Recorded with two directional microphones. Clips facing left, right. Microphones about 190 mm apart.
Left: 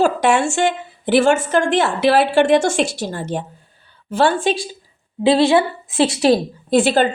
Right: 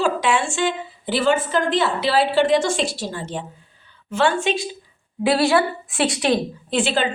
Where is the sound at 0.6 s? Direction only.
50° left (ahead or behind).